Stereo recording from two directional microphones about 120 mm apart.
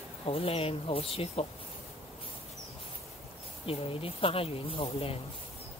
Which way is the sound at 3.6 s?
50° left (ahead or behind).